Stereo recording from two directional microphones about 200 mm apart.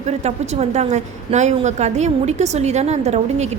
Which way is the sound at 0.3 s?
35° right (ahead or behind).